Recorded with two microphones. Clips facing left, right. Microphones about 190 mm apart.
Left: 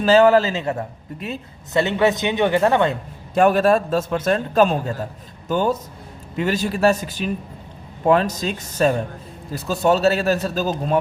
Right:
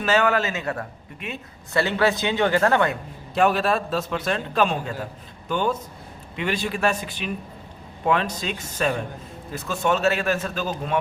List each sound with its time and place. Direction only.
0.0 s a man's voice: 30° left (ahead or behind)
1.1 s a man's voice: 40° left (ahead or behind)
1.7 s a woman's voice: 20° left (ahead or behind)
3.3 s a man's voice: 45° left (ahead or behind)